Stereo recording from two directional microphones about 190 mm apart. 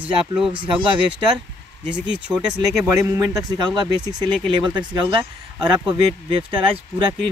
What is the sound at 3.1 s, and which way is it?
Speech, 20° right (ahead or behind).